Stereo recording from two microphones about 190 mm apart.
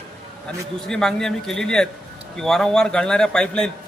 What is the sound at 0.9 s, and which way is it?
A man's voice, 5° left (ahead or behind).